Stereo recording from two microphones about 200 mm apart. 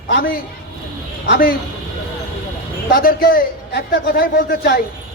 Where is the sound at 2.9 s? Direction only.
45° left (ahead or behind).